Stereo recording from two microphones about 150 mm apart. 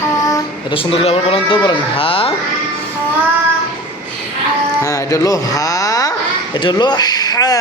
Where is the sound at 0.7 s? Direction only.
40° left (ahead or behind).